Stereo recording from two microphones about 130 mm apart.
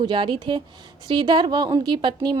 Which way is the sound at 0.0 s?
40° right (ahead or behind).